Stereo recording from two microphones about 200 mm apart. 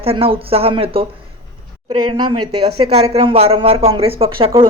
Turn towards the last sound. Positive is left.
turn(degrees=-25)  # may be behind; listen again after turning